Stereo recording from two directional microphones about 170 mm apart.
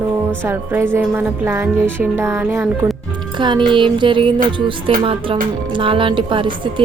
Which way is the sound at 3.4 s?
25° right (ahead or behind).